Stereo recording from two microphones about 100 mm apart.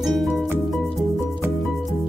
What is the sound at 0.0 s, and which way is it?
Music, centre (ahead or behind).